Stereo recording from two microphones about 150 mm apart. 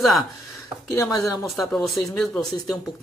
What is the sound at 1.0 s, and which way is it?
Speech, 20° left (ahead or behind).